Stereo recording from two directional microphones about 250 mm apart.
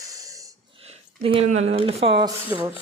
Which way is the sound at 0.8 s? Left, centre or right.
Right.